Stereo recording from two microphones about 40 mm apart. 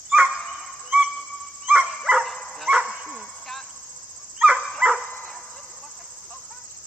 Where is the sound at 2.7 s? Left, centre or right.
Centre.